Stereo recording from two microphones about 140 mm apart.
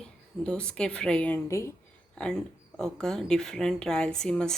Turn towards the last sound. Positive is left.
turn(degrees=5)  # may be behind; listen again after turning